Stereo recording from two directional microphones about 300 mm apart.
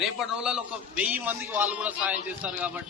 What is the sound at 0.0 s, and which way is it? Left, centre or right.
A man's voice, centre.